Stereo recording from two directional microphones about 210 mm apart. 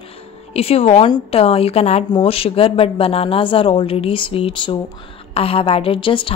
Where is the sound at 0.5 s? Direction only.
30° left (ahead or behind).